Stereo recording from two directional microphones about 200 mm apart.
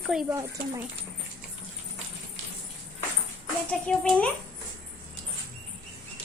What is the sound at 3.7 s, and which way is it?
Speech, 5° left (ahead or behind).